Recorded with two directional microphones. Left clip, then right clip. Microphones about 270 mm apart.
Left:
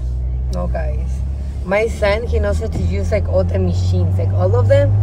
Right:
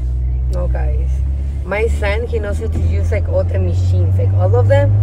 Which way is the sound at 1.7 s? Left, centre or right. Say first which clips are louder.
Left 3 dB; centre.